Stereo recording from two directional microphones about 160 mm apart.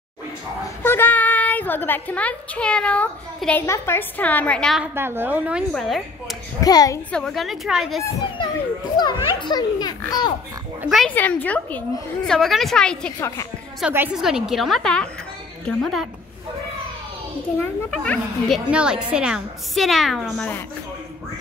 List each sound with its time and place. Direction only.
0.8 s a woman's voice: 15° left (ahead or behind)
4.9 s a woman's voice: 15° right (ahead or behind)
6.6 s a child's voice: 25° left (ahead or behind)
7.1 s a woman's voice: 5° left (ahead or behind)
8.9 s a child's voice: 30° left (ahead or behind)
10.8 s a woman's voice: 5° right (ahead or behind)
11.1 s a woman's voice: 10° left (ahead or behind)
13.7 s a woman's voice: 10° right (ahead or behind)
17.6 s a woman's voice: 10° left (ahead or behind)
18.7 s a woman's voice: 5° right (ahead or behind)